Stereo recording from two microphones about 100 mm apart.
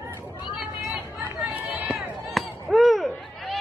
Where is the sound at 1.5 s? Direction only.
15° right (ahead or behind).